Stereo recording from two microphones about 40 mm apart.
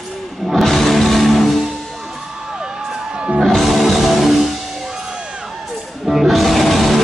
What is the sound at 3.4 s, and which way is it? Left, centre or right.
Music, centre.